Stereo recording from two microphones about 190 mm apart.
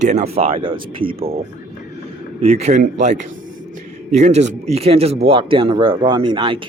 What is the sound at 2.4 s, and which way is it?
Speech, 35° right (ahead or behind).